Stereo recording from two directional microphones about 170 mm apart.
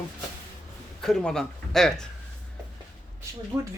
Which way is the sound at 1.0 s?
Centre (ahead or behind).